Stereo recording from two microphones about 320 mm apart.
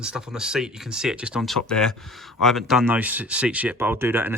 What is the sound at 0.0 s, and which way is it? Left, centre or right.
Speech, centre.